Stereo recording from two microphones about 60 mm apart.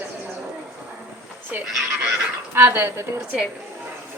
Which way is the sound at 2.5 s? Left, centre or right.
Right.